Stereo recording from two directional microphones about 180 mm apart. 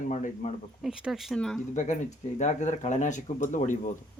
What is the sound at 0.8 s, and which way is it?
Speech, 5° right (ahead or behind).